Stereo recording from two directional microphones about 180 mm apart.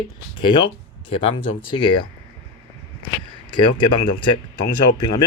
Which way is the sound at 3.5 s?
25° left (ahead or behind).